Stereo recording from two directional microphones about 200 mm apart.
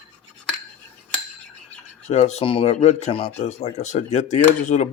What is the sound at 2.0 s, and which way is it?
Speech, 35° left (ahead or behind).